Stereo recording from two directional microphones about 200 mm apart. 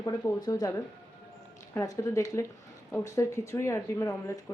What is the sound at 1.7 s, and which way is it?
Speech, 15° left (ahead or behind).